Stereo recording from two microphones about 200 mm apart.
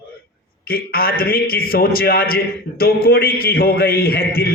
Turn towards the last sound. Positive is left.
turn(degrees=50)  # may be behind; listen again after turning